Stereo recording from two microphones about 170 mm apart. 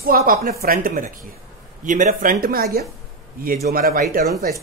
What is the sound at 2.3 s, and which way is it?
Speech, 65° right (ahead or behind).